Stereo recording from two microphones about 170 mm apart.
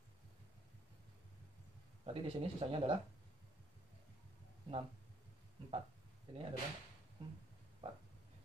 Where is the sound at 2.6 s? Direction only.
35° right (ahead or behind).